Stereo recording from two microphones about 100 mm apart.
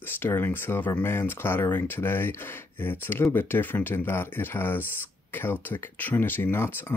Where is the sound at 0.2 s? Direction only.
20° left (ahead or behind).